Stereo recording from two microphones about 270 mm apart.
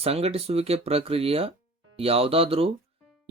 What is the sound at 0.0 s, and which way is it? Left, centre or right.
Speech, right.